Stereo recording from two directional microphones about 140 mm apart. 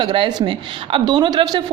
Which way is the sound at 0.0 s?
35° right (ahead or behind).